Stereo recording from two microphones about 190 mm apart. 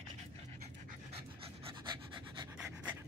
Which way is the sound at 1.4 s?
25° right (ahead or behind).